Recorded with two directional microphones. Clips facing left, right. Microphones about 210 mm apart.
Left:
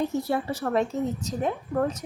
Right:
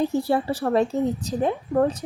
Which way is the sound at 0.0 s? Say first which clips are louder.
Right 4 dB; 30° right (ahead or behind).